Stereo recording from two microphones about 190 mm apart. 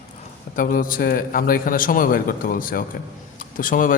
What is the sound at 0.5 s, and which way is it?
A man's voice, 45° left (ahead or behind).